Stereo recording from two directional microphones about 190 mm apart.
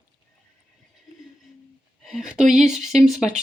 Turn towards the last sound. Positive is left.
turn(degrees=0)  # may be behind; listen again after turning